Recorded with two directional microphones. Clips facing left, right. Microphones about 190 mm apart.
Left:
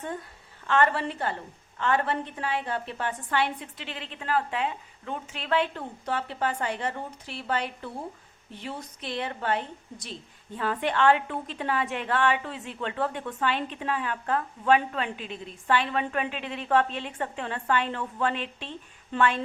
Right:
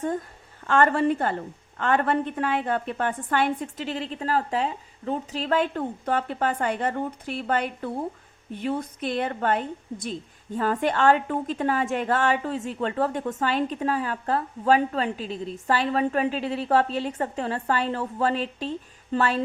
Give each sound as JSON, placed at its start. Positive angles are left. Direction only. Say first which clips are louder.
{"t": 0.0, "sound": "a woman's voice", "louder": "right 7 dB", "side_deg": -45}